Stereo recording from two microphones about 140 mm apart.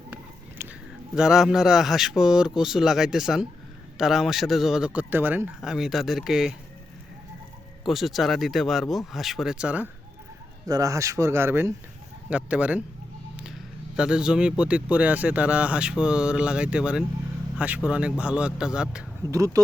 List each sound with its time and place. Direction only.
0.6 s a sound: 15° right (ahead or behind)
1.1 s speech: 5° right (ahead or behind)
7.9 s speech: centre (ahead or behind)
10.7 s speech: 25° right (ahead or behind)
13.4 s vehicle: 5° right (ahead or behind)
14.6 s speech: 10° right (ahead or behind)
19.3 s speech: 25° right (ahead or behind)